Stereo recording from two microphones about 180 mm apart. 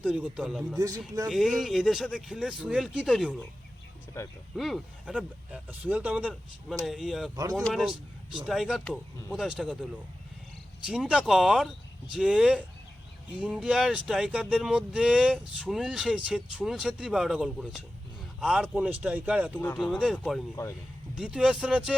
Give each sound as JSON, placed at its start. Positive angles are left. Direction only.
{"t": 0.0, "sound": "speech", "side_deg": -5}
{"t": 0.8, "sound": "speech", "side_deg": -20}
{"t": 1.3, "sound": "speech", "side_deg": 0}
{"t": 4.1, "sound": "speech", "side_deg": 15}
{"t": 4.5, "sound": "speech", "side_deg": 0}
{"t": 10.8, "sound": "speech", "side_deg": -5}
{"t": 19.5, "sound": "speech", "side_deg": 10}